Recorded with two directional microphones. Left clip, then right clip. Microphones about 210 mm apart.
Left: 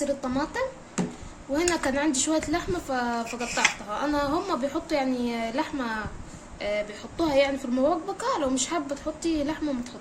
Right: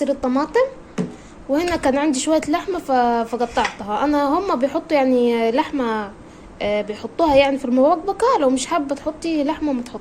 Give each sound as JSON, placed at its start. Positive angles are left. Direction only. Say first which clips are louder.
{"t": 0.0, "sound": "speech", "louder": "right 8 dB", "side_deg": -40}